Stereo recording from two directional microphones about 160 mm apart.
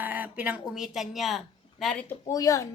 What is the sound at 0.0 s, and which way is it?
Speech, 10° right (ahead or behind).